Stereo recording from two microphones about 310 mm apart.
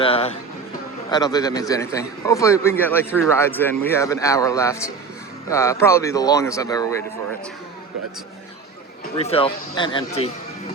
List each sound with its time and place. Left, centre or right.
0.0 s a man's voice: centre
9.1 s a man's voice: centre